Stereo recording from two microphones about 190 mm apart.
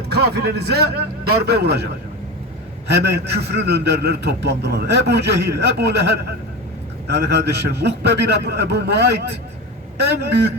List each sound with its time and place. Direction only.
0.1 s a man's voice: 60° right (ahead or behind)